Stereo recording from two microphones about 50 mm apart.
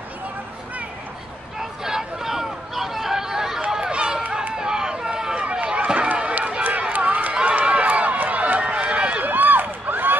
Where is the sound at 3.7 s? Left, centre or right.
Centre.